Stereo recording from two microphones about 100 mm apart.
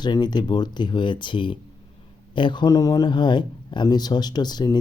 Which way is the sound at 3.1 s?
50° left (ahead or behind).